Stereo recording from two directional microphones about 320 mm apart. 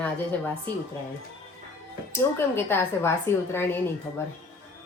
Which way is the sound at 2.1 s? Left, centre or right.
Centre.